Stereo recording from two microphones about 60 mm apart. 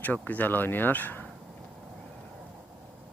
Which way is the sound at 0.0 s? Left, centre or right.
Left.